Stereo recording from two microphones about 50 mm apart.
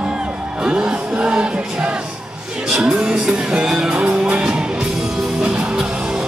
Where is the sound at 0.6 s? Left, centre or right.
Right.